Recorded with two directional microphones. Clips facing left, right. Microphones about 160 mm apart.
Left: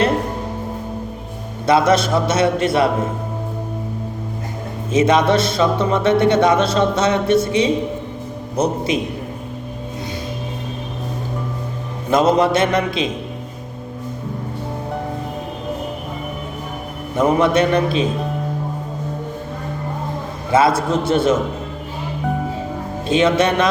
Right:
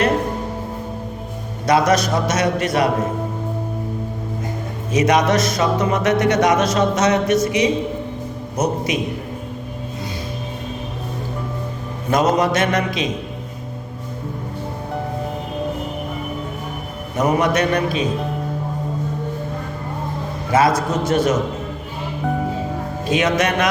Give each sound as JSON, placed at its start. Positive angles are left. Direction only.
{"t": 1.6, "sound": "a man's voice", "side_deg": 25}
{"t": 4.9, "sound": "a man's voice", "side_deg": 25}
{"t": 12.1, "sound": "a man's voice", "side_deg": 30}
{"t": 17.2, "sound": "a man's voice", "side_deg": 25}
{"t": 20.5, "sound": "a man's voice", "side_deg": 25}
{"t": 23.0, "sound": "a man's voice", "side_deg": 30}